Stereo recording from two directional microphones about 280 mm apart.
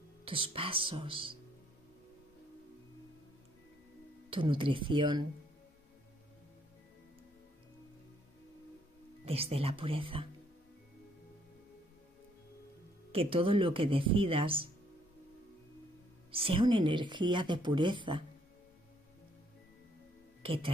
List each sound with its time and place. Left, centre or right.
0.2 s speech: centre
4.3 s a woman's voice: centre
9.2 s speech: right
13.1 s speech: centre
16.3 s a woman's voice: centre
20.4 s speech: centre